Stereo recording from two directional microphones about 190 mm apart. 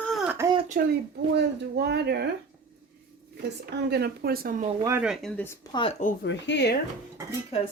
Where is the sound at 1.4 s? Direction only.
60° right (ahead or behind).